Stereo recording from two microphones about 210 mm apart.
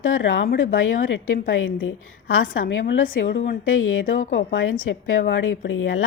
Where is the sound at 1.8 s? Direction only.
75° left (ahead or behind).